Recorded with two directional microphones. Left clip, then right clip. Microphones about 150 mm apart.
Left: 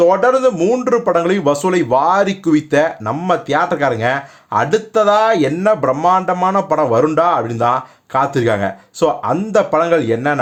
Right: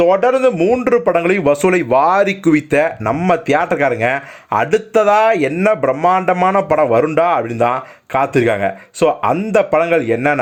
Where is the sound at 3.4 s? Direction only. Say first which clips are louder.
Right 1 dB; 30° right (ahead or behind).